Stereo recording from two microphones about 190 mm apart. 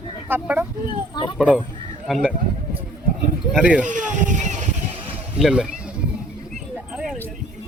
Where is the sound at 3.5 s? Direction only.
5° right (ahead or behind).